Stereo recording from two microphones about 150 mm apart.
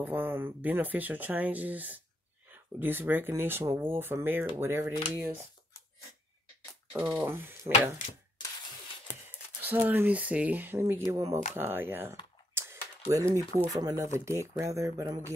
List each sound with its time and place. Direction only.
0.0 s speech: 15° right (ahead or behind)
6.9 s speech: 15° right (ahead or behind)
9.6 s speech: 10° right (ahead or behind)
12.5 s mechanisms: 15° right (ahead or behind)
13.7 s speech: 25° right (ahead or behind)